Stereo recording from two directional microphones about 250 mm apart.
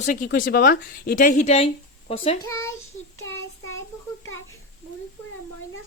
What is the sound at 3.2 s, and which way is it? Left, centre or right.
Child singing, left.